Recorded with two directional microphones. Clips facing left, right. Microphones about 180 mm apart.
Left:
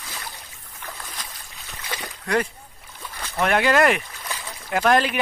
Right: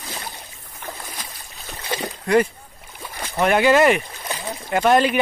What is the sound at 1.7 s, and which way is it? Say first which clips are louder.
Splash: right 7 dB; 30° right (ahead or behind).